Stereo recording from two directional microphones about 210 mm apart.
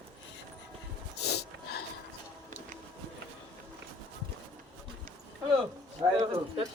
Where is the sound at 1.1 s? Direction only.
50° left (ahead or behind).